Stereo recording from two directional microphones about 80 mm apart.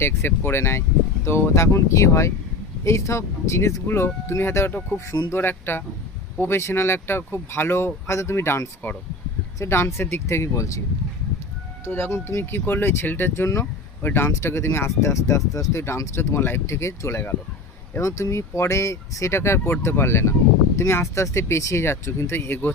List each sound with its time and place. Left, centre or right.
0.0 s speech: left
11.9 s speech: left